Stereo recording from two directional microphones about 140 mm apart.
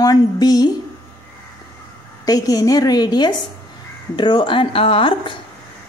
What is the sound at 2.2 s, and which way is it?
A woman's voice, 25° left (ahead or behind).